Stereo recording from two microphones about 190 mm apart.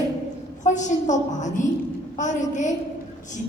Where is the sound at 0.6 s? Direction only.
40° left (ahead or behind).